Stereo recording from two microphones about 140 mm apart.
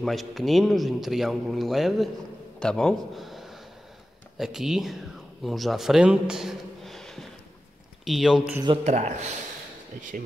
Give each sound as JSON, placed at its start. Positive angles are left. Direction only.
{"t": 0.0, "sound": "a man's voice", "side_deg": 0}
{"t": 8.8, "sound": "a man's voice", "side_deg": -55}
{"t": 9.9, "sound": "speech", "side_deg": -65}